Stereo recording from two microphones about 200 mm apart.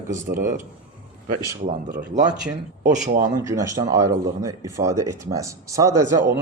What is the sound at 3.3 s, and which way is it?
Speech, 15° right (ahead or behind).